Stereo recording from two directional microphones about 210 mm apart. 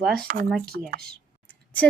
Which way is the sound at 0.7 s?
45° right (ahead or behind).